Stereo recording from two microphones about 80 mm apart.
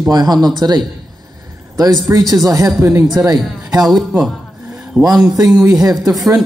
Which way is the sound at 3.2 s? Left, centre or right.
Right.